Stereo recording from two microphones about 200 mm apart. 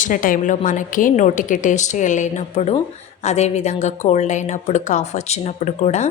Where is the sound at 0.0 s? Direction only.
45° left (ahead or behind).